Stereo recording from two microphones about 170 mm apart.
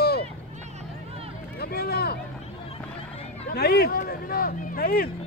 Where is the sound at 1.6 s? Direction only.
65° left (ahead or behind).